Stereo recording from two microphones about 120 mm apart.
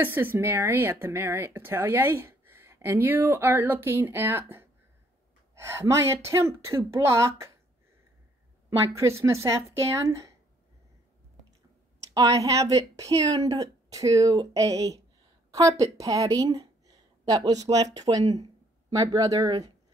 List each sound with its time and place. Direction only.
0.0 s speech: 15° right (ahead or behind)
8.6 s speech: 25° right (ahead or behind)
12.1 s speech: 30° right (ahead or behind)